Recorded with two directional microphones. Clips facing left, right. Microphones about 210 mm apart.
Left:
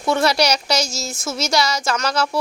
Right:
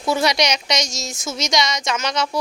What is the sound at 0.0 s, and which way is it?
Speech, centre (ahead or behind).